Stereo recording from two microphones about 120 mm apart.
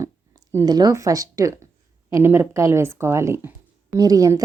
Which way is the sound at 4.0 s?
30° right (ahead or behind).